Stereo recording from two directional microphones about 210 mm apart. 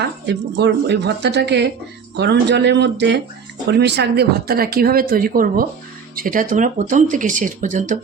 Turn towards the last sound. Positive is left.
turn(degrees=-35)  # may be behind; listen again after turning